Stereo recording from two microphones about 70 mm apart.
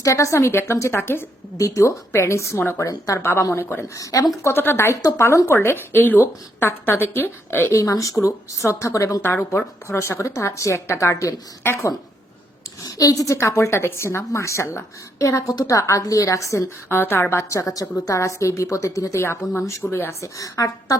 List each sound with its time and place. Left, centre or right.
0.0 s a woman's voice: left
1.5 s a woman's voice: left
3.9 s speech: left
4.4 s a woman's voice: left
5.5 s a woman's voice: left
7.7 s a woman's voice: left
11.6 s a woman's voice: left
12.8 s a woman's voice: left
16.9 s a woman's voice: left
19.2 s a woman's voice: left